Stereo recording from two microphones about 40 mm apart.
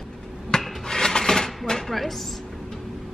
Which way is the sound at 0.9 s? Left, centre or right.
Centre.